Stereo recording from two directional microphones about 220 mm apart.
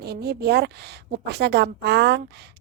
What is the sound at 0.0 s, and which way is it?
A woman's voice, 45° right (ahead or behind).